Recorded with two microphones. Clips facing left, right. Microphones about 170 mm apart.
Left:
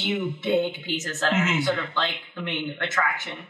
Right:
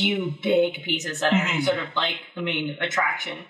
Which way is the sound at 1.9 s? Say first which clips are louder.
Right 1 dB; 15° right (ahead or behind).